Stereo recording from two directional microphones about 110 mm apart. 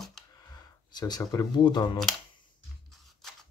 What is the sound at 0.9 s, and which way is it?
Speech, 40° left (ahead or behind).